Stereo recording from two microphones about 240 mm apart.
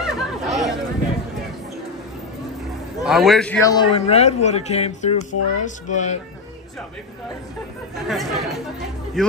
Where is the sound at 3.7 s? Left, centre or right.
Left.